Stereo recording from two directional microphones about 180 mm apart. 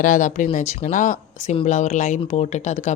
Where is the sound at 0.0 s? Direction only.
45° left (ahead or behind).